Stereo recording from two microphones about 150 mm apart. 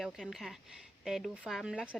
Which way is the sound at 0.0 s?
Centre (ahead or behind).